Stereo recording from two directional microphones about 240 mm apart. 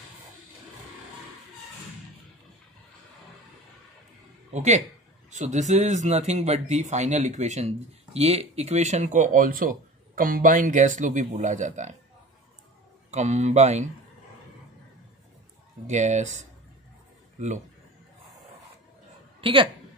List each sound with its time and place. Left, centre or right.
4.5 s speech: right
13.1 s speech: right
15.9 s speech: right
19.4 s a woman's voice: right